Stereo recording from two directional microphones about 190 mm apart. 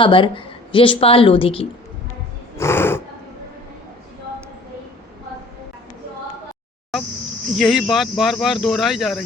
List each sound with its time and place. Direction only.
0.0 s a woman's voice: 25° left (ahead or behind)
2.6 s a sound: 15° left (ahead or behind)
7.5 s speech: centre (ahead or behind)